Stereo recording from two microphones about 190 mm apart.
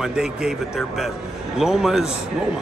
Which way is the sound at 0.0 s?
5° right (ahead or behind).